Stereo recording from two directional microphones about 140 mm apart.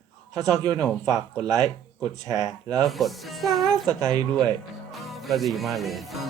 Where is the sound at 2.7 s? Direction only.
5° left (ahead or behind).